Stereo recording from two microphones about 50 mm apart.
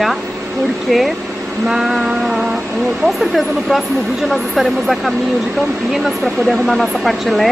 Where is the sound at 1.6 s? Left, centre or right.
Centre.